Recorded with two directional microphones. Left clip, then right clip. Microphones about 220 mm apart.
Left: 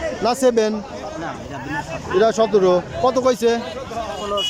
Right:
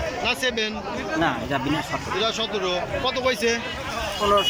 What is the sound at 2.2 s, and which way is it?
Speech, 35° left (ahead or behind).